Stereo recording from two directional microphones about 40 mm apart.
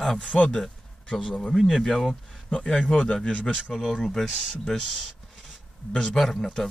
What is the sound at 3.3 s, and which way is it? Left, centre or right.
Speech, left.